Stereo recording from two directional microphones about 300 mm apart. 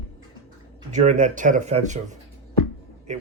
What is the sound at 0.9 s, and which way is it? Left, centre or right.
Speech, right.